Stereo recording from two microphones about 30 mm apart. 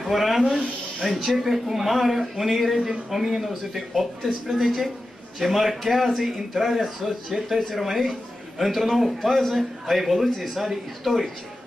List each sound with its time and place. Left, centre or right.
0.0 s speech: centre
0.4 s speech: centre
1.1 s a man's voice: centre